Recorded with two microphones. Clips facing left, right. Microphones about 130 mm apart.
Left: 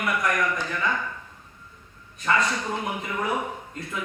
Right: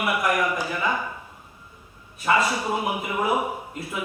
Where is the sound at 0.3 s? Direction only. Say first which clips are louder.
Right 2 dB; 10° right (ahead or behind).